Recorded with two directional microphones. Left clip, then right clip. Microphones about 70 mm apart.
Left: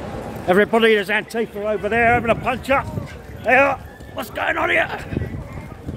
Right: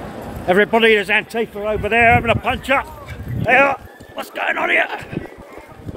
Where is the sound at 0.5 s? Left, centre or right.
Centre.